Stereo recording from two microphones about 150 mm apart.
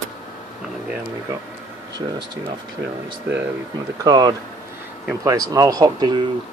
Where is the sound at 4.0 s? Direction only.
25° right (ahead or behind).